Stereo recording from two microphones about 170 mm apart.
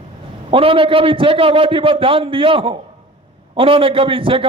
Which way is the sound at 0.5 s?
30° right (ahead or behind).